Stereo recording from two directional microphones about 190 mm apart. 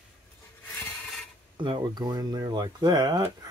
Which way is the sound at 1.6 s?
25° right (ahead or behind).